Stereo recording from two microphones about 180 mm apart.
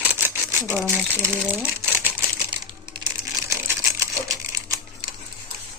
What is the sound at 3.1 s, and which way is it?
Crumpling, 15° right (ahead or behind).